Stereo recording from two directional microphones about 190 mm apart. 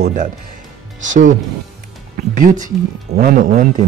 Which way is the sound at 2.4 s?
40° right (ahead or behind).